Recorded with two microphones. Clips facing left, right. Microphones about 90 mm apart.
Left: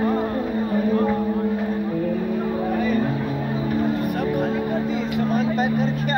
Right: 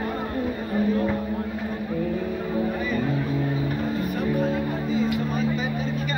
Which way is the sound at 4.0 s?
65° left (ahead or behind).